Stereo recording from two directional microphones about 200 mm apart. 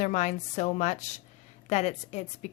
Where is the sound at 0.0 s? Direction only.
35° left (ahead or behind).